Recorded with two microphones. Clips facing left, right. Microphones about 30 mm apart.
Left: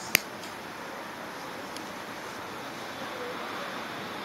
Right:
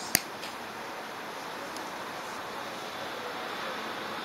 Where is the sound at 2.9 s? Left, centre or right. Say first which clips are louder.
Left 1 dB; right.